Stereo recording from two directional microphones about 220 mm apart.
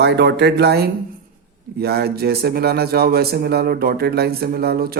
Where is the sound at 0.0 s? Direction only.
50° right (ahead or behind).